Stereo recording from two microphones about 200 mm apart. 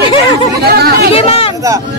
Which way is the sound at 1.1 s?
30° left (ahead or behind).